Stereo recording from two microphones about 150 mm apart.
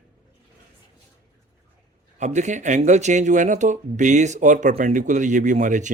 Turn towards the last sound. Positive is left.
turn(degrees=-55)  # may be behind; listen again after turning